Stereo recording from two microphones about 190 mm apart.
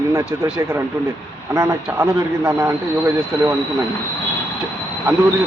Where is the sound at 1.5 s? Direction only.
15° right (ahead or behind).